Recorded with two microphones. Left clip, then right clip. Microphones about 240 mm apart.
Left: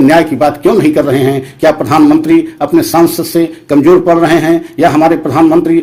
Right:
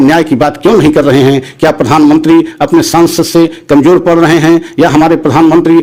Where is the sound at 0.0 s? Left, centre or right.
Right.